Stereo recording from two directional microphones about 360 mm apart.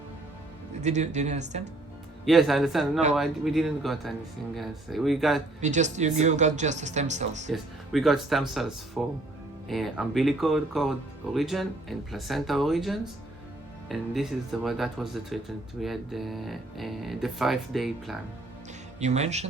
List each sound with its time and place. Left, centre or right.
0.8 s speech: centre
2.2 s speech: centre
5.5 s speech: centre
7.5 s speech: centre
18.9 s speech: centre